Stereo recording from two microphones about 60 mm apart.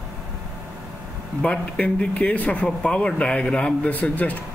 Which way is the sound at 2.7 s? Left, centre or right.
Centre.